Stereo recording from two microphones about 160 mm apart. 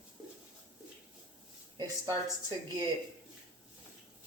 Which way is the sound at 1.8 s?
25° right (ahead or behind).